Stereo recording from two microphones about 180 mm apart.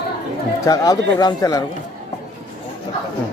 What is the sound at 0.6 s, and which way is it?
Speech, 20° left (ahead or behind).